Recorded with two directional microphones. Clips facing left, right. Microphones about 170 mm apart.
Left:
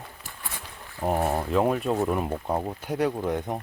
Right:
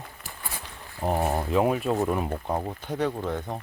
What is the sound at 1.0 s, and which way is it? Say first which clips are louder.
Speech: left 1 dB; 5° left (ahead or behind).